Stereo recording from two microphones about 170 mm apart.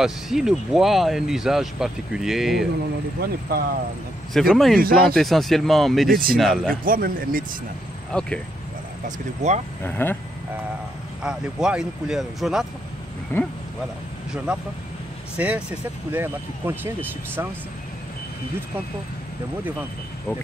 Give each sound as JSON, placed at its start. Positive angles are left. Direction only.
{"t": 0.0, "sound": "speech", "side_deg": -5}
{"t": 3.2, "sound": "a man's voice", "side_deg": -65}
{"t": 4.3, "sound": "speech", "side_deg": 0}
{"t": 6.8, "sound": "a man's voice", "side_deg": -55}
{"t": 8.1, "sound": "speech", "side_deg": 5}
{"t": 9.0, "sound": "speech", "side_deg": -40}
{"t": 9.8, "sound": "speech", "side_deg": 10}
{"t": 11.2, "sound": "speech", "side_deg": -5}
{"t": 13.3, "sound": "speech", "side_deg": 15}
{"t": 14.3, "sound": "speech", "side_deg": -5}